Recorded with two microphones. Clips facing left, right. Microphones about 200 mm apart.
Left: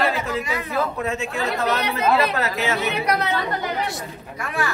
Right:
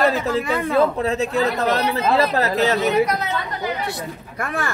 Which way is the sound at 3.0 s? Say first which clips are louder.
Left 2 dB; 65° left (ahead or behind).